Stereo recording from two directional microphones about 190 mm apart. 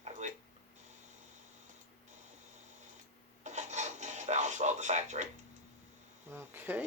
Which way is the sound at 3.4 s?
40° right (ahead or behind).